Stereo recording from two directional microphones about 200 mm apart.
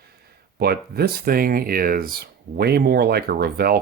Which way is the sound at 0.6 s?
50° right (ahead or behind).